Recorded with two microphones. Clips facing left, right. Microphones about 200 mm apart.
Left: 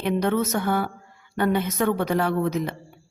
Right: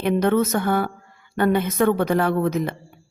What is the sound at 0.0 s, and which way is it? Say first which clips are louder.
A woman's voice: right 4 dB; 55° right (ahead or behind).